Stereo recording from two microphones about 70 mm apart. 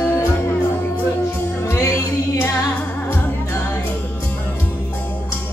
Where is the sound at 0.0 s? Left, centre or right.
Left.